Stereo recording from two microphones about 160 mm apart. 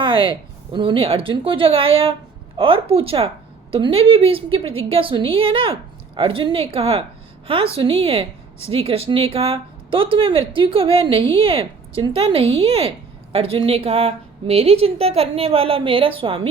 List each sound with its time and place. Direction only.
0.0 s speech: 30° right (ahead or behind)